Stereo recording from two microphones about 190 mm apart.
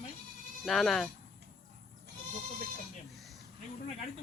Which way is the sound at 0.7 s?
Centre (ahead or behind).